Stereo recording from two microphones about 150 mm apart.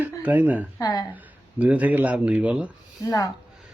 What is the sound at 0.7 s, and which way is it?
Speech, 25° left (ahead or behind).